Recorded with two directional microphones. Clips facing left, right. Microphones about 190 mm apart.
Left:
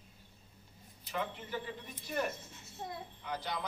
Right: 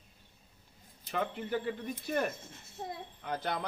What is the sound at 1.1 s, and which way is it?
A woman's voice, 50° right (ahead or behind).